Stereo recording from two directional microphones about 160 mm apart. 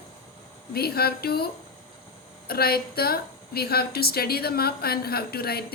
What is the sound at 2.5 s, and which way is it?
A woman's voice, 70° left (ahead or behind).